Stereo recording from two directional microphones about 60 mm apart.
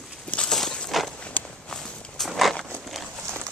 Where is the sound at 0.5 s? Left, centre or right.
Centre.